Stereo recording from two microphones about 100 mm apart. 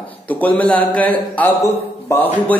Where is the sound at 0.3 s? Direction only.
15° left (ahead or behind).